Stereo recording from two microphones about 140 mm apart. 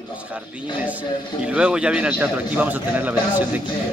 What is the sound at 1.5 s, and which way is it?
A man's voice, 5° right (ahead or behind).